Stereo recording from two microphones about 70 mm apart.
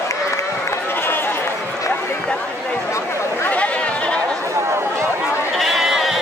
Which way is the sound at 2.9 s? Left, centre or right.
Left.